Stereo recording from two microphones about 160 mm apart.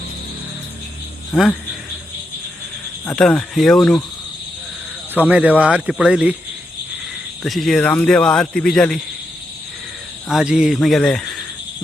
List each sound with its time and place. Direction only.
1.3 s speech: 5° left (ahead or behind)
3.1 s speech: 5° left (ahead or behind)
5.3 s speech: 10° right (ahead or behind)
7.4 s speech: centre (ahead or behind)
10.2 s speech: centre (ahead or behind)